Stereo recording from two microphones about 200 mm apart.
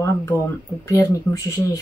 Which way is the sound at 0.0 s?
10° left (ahead or behind).